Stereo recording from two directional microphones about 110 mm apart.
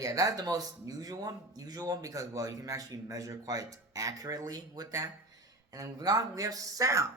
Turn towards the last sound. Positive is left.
turn(degrees=-30)  # may be behind; listen again after turning